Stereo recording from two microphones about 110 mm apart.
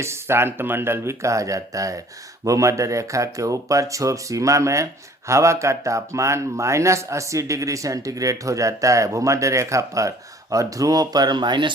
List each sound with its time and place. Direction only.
0.0 s speech: 25° right (ahead or behind); by 11.7 s 45° right (ahead or behind)